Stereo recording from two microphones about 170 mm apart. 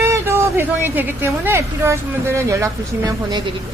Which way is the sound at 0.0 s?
15° right (ahead or behind).